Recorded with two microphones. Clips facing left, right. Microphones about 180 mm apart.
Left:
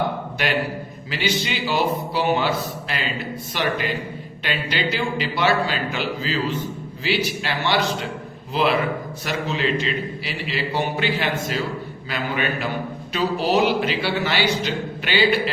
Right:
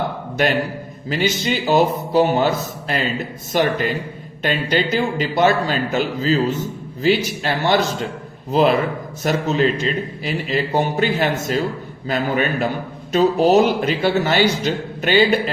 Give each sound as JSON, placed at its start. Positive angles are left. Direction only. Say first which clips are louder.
{"t": 1.1, "sound": "a man's voice", "louder": "right 5 dB", "side_deg": -45}